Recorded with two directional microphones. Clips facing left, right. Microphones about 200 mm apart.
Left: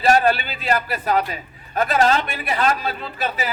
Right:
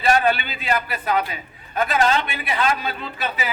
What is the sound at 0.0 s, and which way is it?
A man's voice, 40° left (ahead or behind).